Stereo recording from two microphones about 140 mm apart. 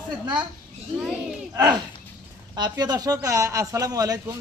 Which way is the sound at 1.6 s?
30° right (ahead or behind).